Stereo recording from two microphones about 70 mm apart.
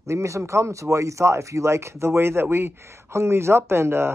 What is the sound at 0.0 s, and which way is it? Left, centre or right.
Speech, right.